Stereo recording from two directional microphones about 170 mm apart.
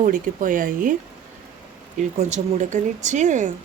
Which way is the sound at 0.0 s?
50° right (ahead or behind).